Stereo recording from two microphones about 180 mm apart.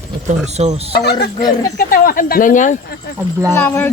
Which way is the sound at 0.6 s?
35° right (ahead or behind).